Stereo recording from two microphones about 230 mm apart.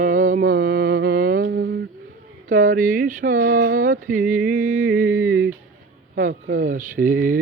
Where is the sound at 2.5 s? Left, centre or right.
Right.